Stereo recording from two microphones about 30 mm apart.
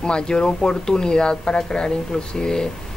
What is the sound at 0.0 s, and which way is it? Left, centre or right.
Speech, left.